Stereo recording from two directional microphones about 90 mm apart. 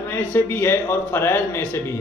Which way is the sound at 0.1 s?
25° left (ahead or behind).